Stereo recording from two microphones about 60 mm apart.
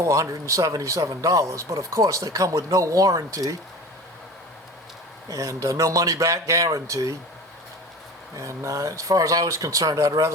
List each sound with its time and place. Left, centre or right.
0.0 s speech: right
5.3 s speech: right
8.4 s speech: right